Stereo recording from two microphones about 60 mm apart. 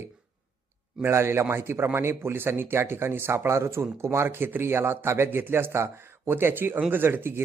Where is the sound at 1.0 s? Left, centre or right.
Right.